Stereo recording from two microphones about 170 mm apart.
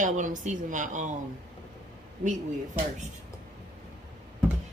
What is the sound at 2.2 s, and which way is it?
Speech, 45° right (ahead or behind).